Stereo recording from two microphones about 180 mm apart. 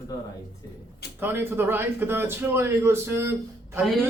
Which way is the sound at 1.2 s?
10° right (ahead or behind).